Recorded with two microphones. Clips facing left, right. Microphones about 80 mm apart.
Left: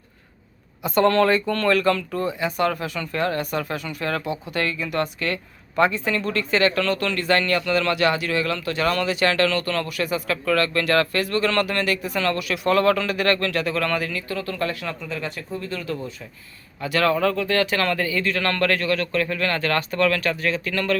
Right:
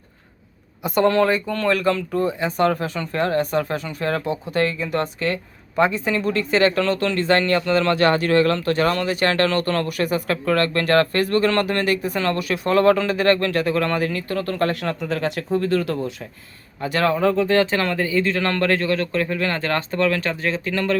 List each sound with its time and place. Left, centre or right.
0.8 s speech: centre; by 16.0 s right
16.8 s speech: right